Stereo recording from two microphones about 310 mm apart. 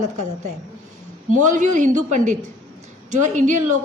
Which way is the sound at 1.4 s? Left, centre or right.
Right.